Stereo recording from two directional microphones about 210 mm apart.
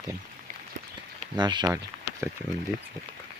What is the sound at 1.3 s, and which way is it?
Speech, 20° right (ahead or behind).